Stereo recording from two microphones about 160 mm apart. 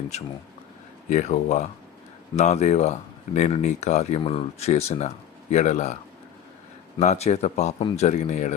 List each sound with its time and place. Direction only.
1.1 s speech: 50° left (ahead or behind)
7.0 s speech: 45° left (ahead or behind)